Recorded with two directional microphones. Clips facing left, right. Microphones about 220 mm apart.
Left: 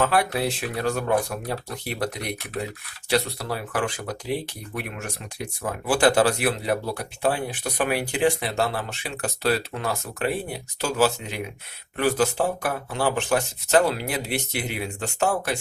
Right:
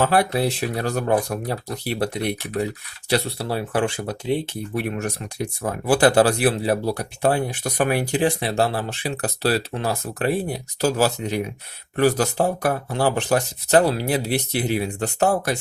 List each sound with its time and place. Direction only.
0.0 s speech: 35° right (ahead or behind)